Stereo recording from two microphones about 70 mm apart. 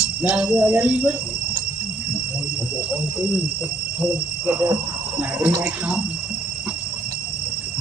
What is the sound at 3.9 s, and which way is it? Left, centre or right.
Speech, right.